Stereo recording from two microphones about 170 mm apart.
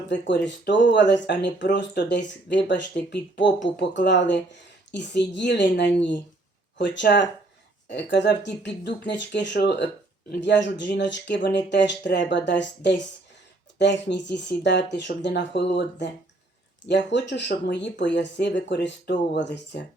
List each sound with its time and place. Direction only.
0.1 s speech: 90° left